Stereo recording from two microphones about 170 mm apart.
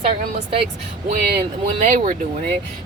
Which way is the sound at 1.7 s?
50° right (ahead or behind).